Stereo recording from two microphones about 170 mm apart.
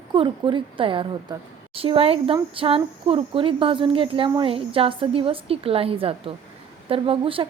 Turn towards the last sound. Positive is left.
turn(degrees=-30)  # may be behind; listen again after turning